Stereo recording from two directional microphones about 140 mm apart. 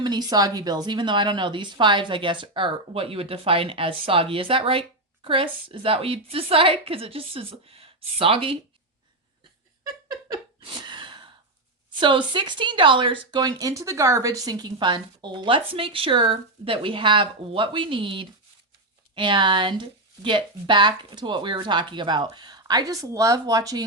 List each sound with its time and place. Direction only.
0.0 s a woman's voice: 30° right (ahead or behind)
10.1 s a sound: 30° right (ahead or behind)
11.9 s a woman's voice: 35° right (ahead or behind)